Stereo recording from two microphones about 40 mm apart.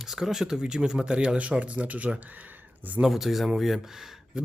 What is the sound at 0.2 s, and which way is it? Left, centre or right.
Speech, centre.